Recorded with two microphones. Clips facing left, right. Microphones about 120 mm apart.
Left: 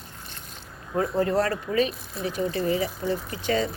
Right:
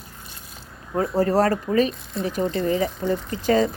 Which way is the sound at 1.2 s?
40° right (ahead or behind).